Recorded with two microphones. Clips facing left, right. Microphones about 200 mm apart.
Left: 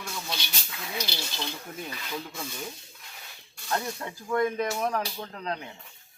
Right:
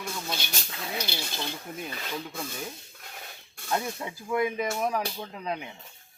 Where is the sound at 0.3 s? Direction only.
50° right (ahead or behind).